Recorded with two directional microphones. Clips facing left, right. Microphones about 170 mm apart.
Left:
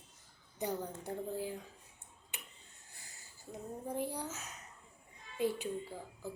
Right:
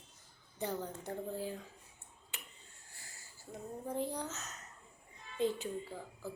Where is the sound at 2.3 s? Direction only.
15° left (ahead or behind).